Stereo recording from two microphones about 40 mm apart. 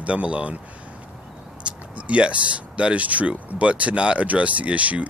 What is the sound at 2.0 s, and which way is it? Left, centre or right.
Speech, right.